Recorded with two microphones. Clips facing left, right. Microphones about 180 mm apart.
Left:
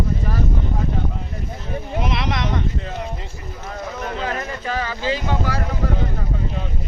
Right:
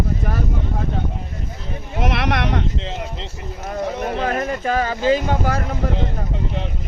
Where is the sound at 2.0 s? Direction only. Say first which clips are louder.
Right 6 dB; 65° right (ahead or behind).